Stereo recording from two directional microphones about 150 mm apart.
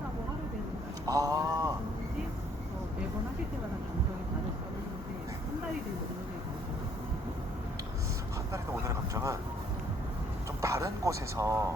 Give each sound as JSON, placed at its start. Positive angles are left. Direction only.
{"t": 1.0, "sound": "a sound", "side_deg": -25}
{"t": 8.5, "sound": "speech", "side_deg": -20}
{"t": 10.6, "sound": "speech", "side_deg": -20}